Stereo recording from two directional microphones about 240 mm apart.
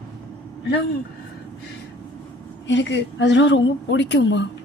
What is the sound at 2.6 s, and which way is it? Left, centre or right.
Speech, left.